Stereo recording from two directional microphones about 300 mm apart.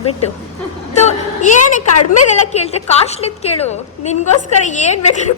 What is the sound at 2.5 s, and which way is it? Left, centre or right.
A woman's voice, left.